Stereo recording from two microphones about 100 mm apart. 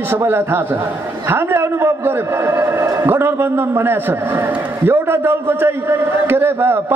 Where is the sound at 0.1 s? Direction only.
25° right (ahead or behind).